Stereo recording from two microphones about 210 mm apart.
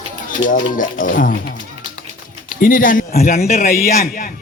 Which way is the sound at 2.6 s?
40° left (ahead or behind).